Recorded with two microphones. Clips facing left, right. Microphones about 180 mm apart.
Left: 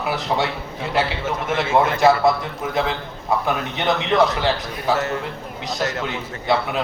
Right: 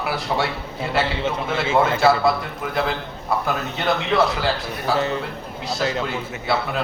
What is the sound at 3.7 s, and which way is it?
A man's voice, 20° left (ahead or behind).